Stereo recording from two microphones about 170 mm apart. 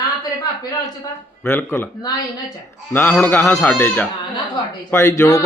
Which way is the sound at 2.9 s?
10° left (ahead or behind).